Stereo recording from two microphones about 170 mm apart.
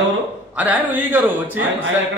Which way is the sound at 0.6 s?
10° right (ahead or behind).